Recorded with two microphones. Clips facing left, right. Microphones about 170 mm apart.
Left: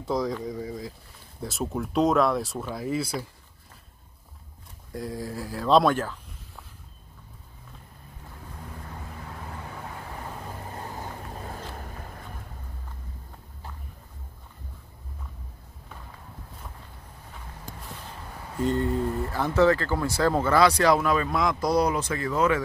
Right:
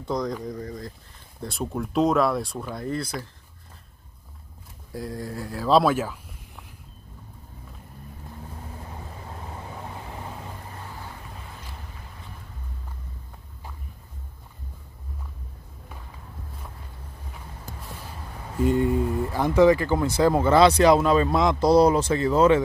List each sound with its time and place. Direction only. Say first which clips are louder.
0.0 s speech: even; 5° left (ahead or behind)
4.9 s speech: even; centre (ahead or behind)
10.8 s vehicle: left 3 dB; 40° left (ahead or behind)
18.6 s speech: right 3 dB; 10° right (ahead or behind); by 22.6 s 30° right (ahead or behind)